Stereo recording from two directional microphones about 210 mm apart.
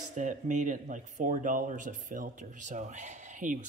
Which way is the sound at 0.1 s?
35° right (ahead or behind).